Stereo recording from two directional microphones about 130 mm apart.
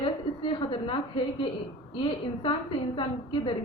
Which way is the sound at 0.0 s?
40° left (ahead or behind).